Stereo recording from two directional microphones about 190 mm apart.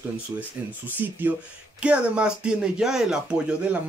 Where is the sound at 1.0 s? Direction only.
10° right (ahead or behind).